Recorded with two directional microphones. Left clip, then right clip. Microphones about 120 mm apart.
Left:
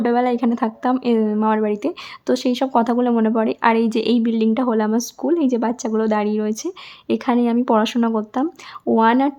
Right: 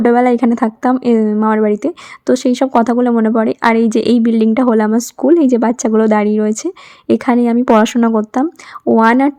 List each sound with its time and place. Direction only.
0.0 s a woman's voice: 45° right (ahead or behind)